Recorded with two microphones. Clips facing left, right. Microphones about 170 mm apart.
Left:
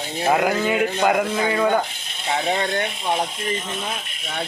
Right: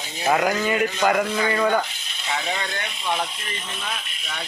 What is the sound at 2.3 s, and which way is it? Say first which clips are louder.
Speech: left 7 dB; 50° left (ahead or behind).